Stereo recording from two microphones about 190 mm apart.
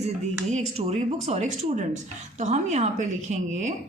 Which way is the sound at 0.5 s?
35° right (ahead or behind).